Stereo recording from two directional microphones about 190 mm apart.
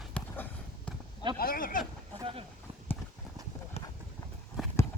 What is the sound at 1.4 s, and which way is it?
Speech, 50° left (ahead or behind).